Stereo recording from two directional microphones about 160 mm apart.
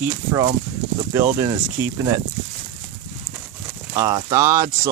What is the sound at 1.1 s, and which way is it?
Speech, 20° right (ahead or behind).